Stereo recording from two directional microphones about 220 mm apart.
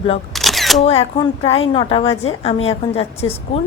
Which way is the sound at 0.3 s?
Centre (ahead or behind).